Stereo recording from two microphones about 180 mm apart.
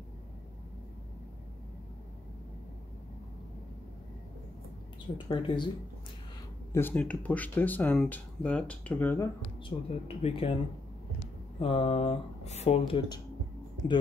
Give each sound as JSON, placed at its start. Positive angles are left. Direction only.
{"t": 5.1, "sound": "speech", "side_deg": 25}
{"t": 6.7, "sound": "speech", "side_deg": 10}
{"t": 9.7, "sound": "speech", "side_deg": 35}
{"t": 11.6, "sound": "speech", "side_deg": 30}